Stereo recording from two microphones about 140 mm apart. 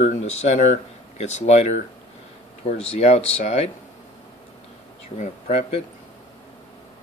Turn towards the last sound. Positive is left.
turn(degrees=55)  # may be behind; listen again after turning